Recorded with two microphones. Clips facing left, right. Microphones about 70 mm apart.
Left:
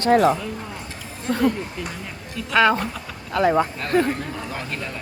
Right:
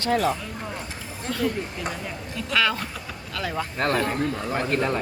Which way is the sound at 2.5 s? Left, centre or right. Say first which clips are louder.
Left 7 dB; left.